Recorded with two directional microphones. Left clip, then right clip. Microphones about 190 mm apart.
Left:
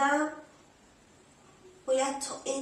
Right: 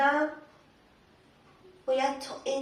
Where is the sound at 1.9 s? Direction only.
15° left (ahead or behind).